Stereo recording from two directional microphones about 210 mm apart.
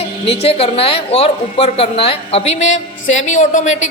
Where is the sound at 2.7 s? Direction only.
65° left (ahead or behind).